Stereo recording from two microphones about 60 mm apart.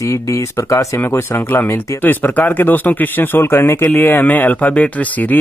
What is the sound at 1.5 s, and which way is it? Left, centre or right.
Speech, left.